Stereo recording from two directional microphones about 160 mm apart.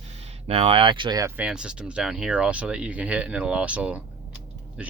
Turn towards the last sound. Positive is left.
turn(degrees=-10)  # may be behind; listen again after turning